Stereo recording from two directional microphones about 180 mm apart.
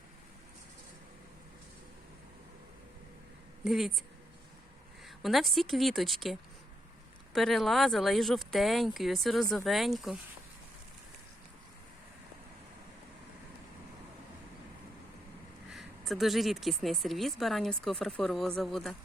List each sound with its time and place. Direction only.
3.6 s speech: centre (ahead or behind)
5.0 s speech: centre (ahead or behind)
7.3 s speech: centre (ahead or behind)
15.7 s speech: centre (ahead or behind)